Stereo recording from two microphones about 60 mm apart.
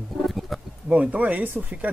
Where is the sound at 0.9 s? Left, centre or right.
Right.